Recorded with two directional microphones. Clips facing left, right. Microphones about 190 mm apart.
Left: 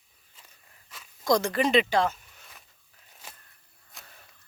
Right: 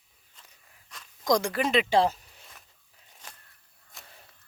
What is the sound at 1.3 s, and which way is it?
Speech, 10° right (ahead or behind).